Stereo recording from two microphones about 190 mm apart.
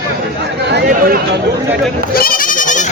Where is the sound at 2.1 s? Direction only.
45° left (ahead or behind).